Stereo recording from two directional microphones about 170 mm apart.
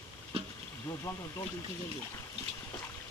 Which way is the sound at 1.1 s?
15° left (ahead or behind).